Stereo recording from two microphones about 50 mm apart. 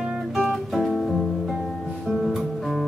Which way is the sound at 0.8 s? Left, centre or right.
Centre.